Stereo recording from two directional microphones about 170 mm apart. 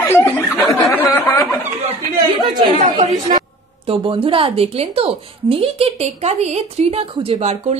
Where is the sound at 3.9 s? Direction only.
30° right (ahead or behind).